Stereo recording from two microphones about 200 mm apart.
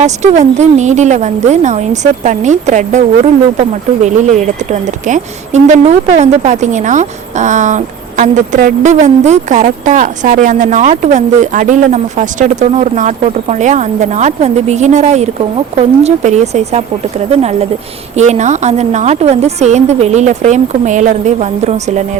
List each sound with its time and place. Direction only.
0.0 s speech: 35° right (ahead or behind)